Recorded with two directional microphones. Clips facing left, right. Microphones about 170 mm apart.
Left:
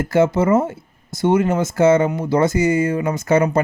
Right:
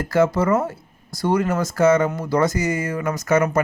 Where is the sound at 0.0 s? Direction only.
25° left (ahead or behind).